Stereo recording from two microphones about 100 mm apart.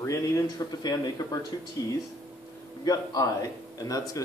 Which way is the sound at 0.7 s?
45° left (ahead or behind).